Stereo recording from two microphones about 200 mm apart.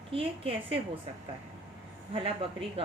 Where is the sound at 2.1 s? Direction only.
25° right (ahead or behind).